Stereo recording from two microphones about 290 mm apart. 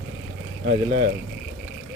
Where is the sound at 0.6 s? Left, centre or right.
Right.